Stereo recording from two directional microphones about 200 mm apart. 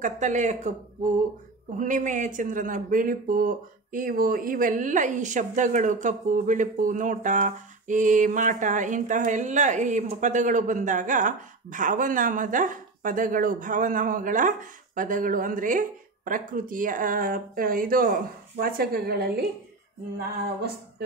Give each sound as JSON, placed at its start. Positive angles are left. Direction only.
{"t": 0.0, "sound": "speech", "side_deg": -40}
{"t": 1.8, "sound": "speech", "side_deg": -40}